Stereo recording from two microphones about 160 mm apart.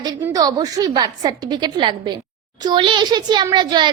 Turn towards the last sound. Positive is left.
turn(degrees=-30)  # may be behind; listen again after turning